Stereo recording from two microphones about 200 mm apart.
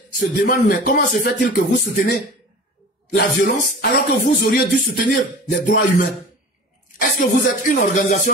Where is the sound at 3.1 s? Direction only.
45° left (ahead or behind).